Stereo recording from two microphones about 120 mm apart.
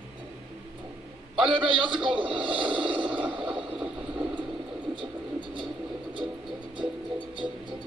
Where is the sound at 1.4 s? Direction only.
45° right (ahead or behind).